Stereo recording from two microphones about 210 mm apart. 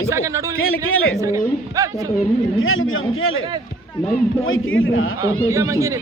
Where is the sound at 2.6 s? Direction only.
75° left (ahead or behind).